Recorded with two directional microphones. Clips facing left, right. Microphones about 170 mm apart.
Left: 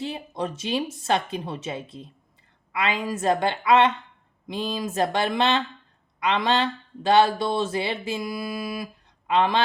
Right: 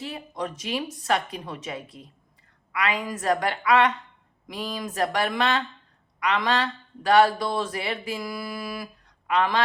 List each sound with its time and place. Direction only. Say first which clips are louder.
0.0 s speech: left 3 dB; 25° left (ahead or behind)